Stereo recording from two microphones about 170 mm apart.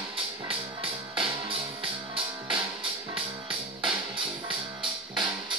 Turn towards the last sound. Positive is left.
turn(degrees=-30)  # may be behind; listen again after turning